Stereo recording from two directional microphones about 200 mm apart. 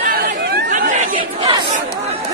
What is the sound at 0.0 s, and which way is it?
Chatter, 45° right (ahead or behind).